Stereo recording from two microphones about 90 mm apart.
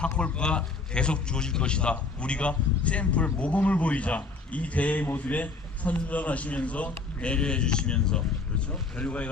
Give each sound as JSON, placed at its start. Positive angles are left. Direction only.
{"t": 0.2, "sound": "a man's voice", "side_deg": 10}